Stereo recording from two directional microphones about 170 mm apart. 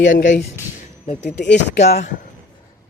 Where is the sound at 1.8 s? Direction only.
40° left (ahead or behind).